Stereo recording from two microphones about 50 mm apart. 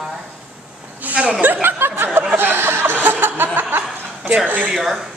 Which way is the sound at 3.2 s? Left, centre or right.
Right.